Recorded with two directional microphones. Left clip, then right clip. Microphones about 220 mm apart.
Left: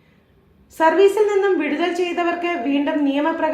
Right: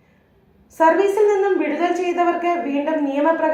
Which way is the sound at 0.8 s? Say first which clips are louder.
Even; 55° left (ahead or behind).